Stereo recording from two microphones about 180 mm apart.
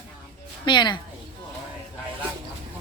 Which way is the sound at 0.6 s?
25° left (ahead or behind).